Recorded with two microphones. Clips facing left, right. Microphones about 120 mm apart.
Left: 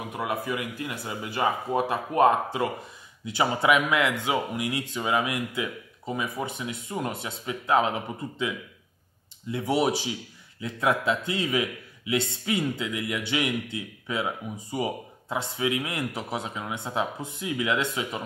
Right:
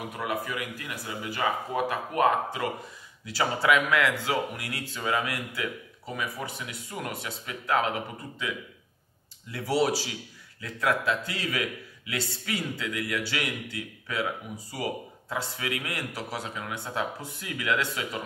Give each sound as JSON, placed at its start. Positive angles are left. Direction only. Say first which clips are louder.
{"t": 0.1, "sound": "a man's voice", "louder": "left 4 dB", "side_deg": 25}
{"t": 9.5, "sound": "a man's voice", "louder": "left 1 dB", "side_deg": 20}